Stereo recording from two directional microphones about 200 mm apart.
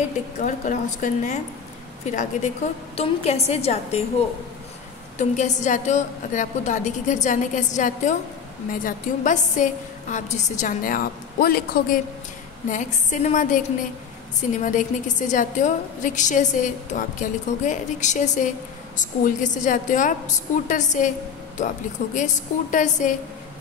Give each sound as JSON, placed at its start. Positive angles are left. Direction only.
{"t": 0.7, "sound": "a woman's voice", "side_deg": 35}
{"t": 5.1, "sound": "a woman's voice", "side_deg": 35}
{"t": 14.6, "sound": "a woman's voice", "side_deg": 40}